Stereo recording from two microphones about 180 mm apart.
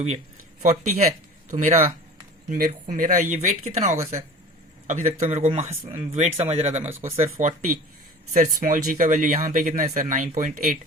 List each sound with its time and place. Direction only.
0.6 s speech: 40° right (ahead or behind)
3.9 s speech: 15° right (ahead or behind)
4.9 s speech: 40° right (ahead or behind)